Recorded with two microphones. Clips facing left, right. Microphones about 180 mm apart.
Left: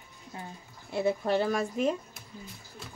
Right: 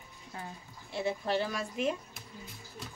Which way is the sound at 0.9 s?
50° left (ahead or behind).